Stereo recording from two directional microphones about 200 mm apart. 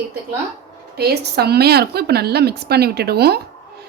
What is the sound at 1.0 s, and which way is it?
Speech, 55° right (ahead or behind).